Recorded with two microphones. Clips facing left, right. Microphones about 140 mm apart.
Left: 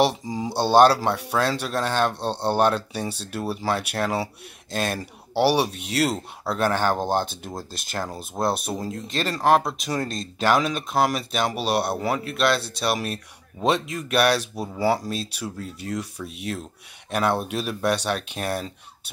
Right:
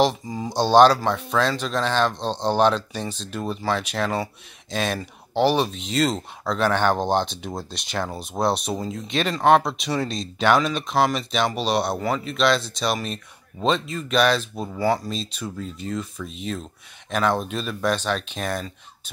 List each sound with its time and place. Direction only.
0.0 s speech: 10° left (ahead or behind)
5.7 s speech: 70° left (ahead or behind)
6.4 s speech: 5° left (ahead or behind)